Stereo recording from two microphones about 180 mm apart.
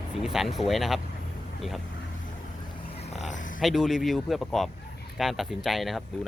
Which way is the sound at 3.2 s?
45° left (ahead or behind).